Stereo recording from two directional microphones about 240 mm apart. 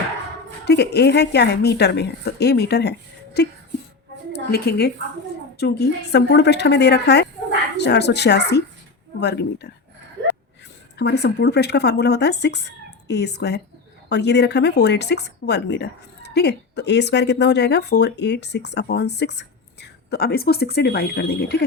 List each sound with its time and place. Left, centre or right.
0.6 s a woman's voice: left
10.9 s speech: left